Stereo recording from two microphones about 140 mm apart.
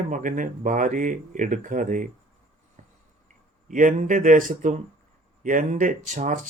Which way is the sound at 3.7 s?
70° right (ahead or behind).